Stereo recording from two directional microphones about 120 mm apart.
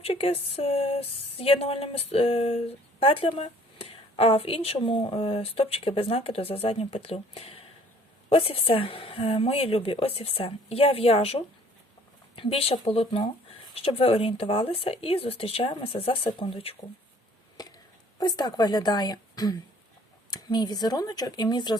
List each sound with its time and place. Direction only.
0.0 s a woman's voice: 55° left (ahead or behind)
18.2 s speech: 30° left (ahead or behind)